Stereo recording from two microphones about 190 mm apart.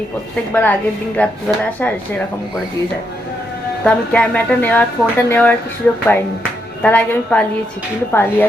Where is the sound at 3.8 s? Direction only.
5° left (ahead or behind).